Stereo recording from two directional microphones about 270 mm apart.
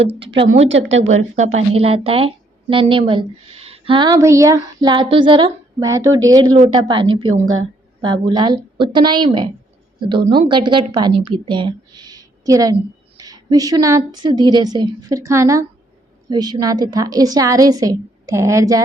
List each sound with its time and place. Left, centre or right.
0.1 s a woman's voice: right
1.2 s speech: right
7.3 s a woman's voice: right
8.3 s a woman's voice: centre